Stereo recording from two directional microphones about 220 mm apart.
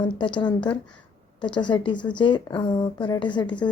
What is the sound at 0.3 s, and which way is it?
Speech, 20° left (ahead or behind).